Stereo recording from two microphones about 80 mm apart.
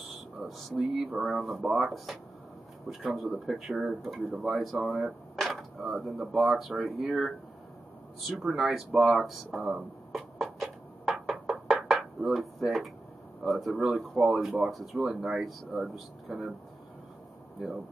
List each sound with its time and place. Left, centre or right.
0.4 s speech: centre
8.3 s a sound: centre
13.4 s speech: centre